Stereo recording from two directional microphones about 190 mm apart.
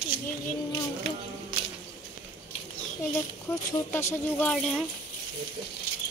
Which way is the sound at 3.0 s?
10° left (ahead or behind).